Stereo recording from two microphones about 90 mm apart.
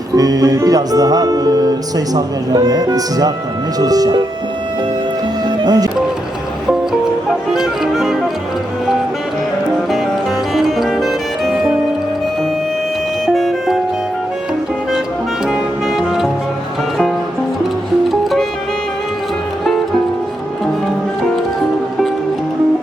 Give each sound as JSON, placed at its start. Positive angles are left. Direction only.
{"t": 0.2, "sound": "music", "side_deg": -45}
{"t": 5.6, "sound": "music", "side_deg": -50}
{"t": 7.5, "sound": "music", "side_deg": -5}
{"t": 10.5, "sound": "music", "side_deg": 0}
{"t": 13.2, "sound": "music", "side_deg": 0}
{"t": 18.1, "sound": "music", "side_deg": 0}